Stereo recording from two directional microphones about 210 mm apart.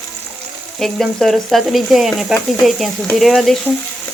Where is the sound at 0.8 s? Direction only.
Centre (ahead or behind).